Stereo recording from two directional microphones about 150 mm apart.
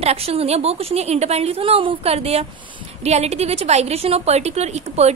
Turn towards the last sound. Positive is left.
turn(degrees=-45)  # may be behind; listen again after turning